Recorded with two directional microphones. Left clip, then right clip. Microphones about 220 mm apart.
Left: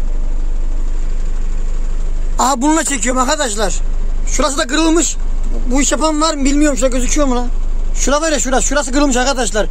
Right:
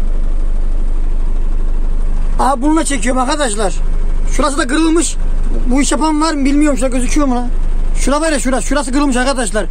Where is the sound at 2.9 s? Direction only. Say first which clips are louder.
Even; 20° left (ahead or behind).